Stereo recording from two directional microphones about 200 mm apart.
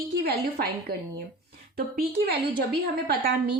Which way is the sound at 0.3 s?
50° right (ahead or behind).